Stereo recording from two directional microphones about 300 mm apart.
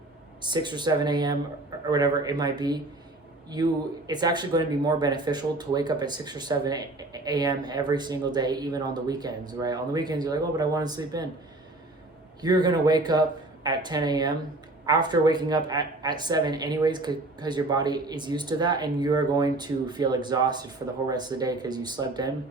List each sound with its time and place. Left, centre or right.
0.4 s speech: centre
12.4 s speech: centre